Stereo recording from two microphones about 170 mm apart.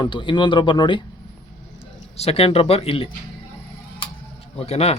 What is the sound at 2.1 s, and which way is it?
Speech, 35° left (ahead or behind).